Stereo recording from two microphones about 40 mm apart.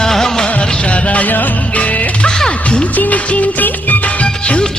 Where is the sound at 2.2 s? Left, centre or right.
Left.